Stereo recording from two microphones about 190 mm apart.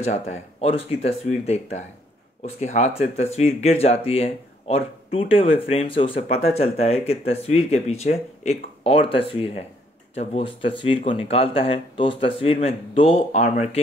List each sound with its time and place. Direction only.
0.0 s speech: 35° left (ahead or behind)